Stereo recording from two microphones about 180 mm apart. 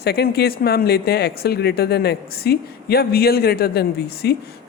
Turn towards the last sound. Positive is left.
turn(degrees=65)  # may be behind; listen again after turning